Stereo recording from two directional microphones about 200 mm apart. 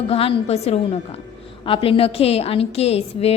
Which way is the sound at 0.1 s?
30° left (ahead or behind).